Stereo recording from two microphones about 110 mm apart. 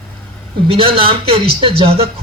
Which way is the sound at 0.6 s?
55° right (ahead or behind).